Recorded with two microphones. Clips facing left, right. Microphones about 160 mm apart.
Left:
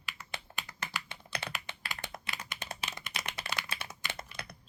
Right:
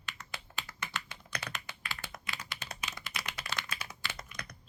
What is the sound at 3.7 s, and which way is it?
Computer keyboard, 25° left (ahead or behind).